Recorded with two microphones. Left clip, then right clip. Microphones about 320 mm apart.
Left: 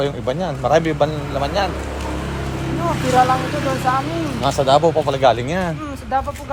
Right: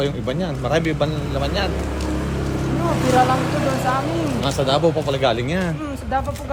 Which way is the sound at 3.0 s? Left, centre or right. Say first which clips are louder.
Left 2 dB; right.